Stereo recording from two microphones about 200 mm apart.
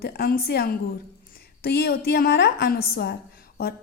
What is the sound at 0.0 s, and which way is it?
A woman's voice, 50° left (ahead or behind).